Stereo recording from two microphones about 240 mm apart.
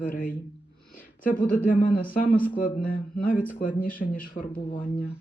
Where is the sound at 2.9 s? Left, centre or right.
Left.